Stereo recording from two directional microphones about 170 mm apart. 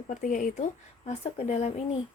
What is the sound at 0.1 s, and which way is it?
A woman's voice, 50° left (ahead or behind).